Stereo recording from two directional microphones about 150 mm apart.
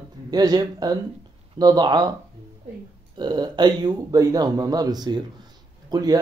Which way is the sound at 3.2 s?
30° right (ahead or behind).